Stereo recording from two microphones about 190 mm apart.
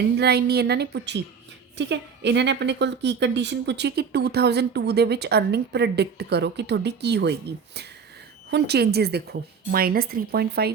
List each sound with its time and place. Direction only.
0.2 s speech: 60° right (ahead or behind)